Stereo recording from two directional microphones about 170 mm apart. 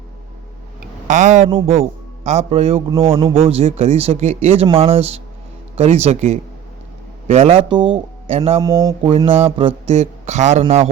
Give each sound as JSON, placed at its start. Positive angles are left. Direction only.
{"t": 1.0, "sound": "speech", "side_deg": -45}
{"t": 1.5, "sound": "a man's voice", "side_deg": -30}
{"t": 8.6, "sound": "speech", "side_deg": -20}
{"t": 9.6, "sound": "a man's voice", "side_deg": -35}